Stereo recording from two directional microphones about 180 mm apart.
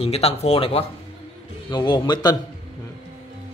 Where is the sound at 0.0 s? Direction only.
35° left (ahead or behind).